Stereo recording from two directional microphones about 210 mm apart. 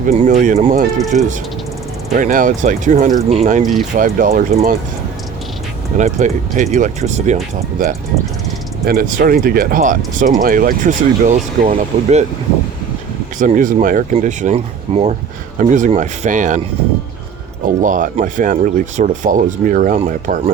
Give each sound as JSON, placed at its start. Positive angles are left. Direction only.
{"t": 0.0, "sound": "speech", "side_deg": -35}
{"t": 6.0, "sound": "speech", "side_deg": -35}
{"t": 13.4, "sound": "speech", "side_deg": -40}
{"t": 17.7, "sound": "speech", "side_deg": -40}